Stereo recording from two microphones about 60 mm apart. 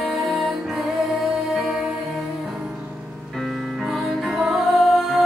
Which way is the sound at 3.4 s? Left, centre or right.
Centre.